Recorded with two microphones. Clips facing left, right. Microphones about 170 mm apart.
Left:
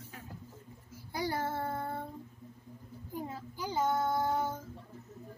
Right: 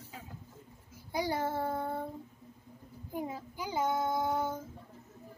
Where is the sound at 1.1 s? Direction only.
15° right (ahead or behind).